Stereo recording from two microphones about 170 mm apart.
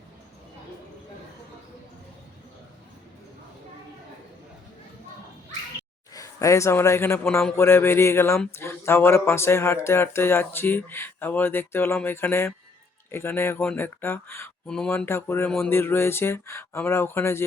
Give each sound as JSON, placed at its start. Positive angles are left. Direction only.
{"t": 6.1, "sound": "a man's voice", "side_deg": 20}